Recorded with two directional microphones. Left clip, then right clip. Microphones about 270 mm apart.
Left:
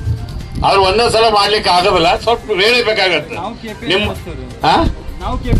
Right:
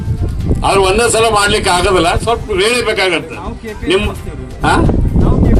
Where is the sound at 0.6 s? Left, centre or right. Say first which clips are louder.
Even; left.